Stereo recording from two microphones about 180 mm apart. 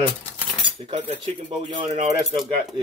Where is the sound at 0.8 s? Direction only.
40° right (ahead or behind).